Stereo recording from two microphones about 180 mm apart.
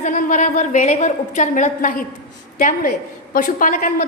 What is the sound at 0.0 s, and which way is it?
A woman's voice, 45° left (ahead or behind).